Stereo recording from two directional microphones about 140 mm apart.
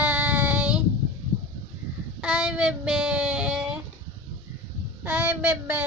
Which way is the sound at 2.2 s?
5° right (ahead or behind).